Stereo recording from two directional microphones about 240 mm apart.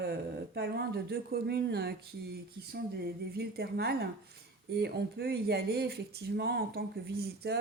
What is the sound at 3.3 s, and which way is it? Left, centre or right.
Speech, right.